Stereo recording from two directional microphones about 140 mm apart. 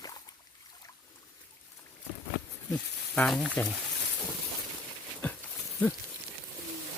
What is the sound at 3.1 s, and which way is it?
Speech, 10° left (ahead or behind).